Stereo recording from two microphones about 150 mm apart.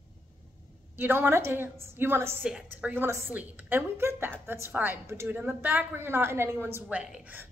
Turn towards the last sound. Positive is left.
turn(degrees=-10)  # may be behind; listen again after turning